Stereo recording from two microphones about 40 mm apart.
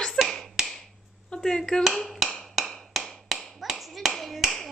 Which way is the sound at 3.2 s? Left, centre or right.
Centre.